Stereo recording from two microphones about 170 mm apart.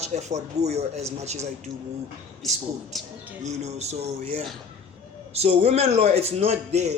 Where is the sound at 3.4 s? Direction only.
40° right (ahead or behind).